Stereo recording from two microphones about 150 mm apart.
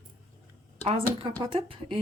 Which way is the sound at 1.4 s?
35° right (ahead or behind).